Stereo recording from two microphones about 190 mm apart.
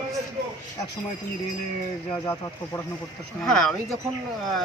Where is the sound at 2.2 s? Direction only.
15° left (ahead or behind).